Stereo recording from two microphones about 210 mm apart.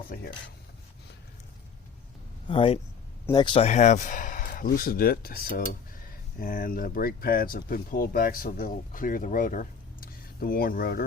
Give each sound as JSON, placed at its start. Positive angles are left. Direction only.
{"t": 0.1, "sound": "speech", "side_deg": 45}
{"t": 2.5, "sound": "speech", "side_deg": 25}